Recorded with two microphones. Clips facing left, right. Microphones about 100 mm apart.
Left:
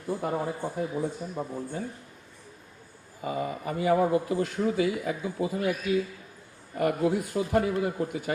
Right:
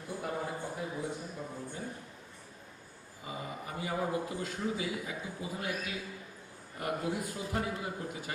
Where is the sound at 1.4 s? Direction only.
45° left (ahead or behind).